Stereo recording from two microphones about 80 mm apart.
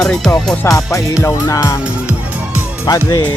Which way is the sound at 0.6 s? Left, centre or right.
Left.